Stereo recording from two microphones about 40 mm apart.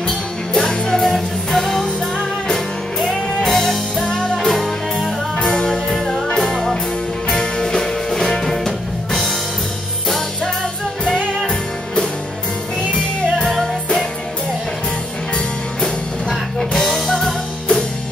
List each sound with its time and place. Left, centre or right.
0.6 s music: centre
3.4 s music: centre
4.5 s music: centre
11.1 s music: left
15.3 s music: centre